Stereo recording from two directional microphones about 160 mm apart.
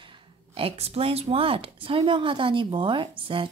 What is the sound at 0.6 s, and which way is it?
Speech, 40° right (ahead or behind).